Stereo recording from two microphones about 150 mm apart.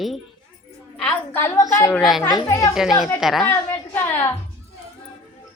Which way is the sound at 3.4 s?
15° left (ahead or behind).